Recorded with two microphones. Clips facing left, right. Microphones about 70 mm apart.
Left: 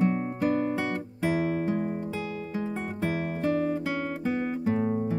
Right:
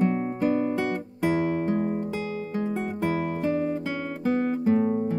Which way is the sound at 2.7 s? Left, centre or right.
Centre.